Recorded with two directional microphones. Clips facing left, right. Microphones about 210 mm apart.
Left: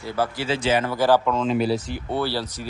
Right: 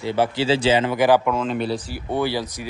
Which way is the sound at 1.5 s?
Centre (ahead or behind).